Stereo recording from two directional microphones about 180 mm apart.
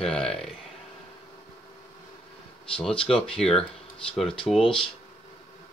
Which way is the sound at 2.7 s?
5° left (ahead or behind).